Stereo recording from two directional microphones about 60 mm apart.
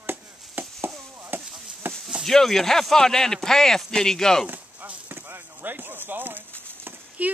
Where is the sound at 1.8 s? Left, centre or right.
Right.